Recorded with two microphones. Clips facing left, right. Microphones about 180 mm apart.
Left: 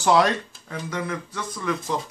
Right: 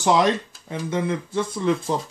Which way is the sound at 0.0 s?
20° right (ahead or behind).